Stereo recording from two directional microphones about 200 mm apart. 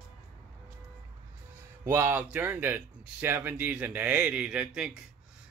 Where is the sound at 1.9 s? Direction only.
10° right (ahead or behind).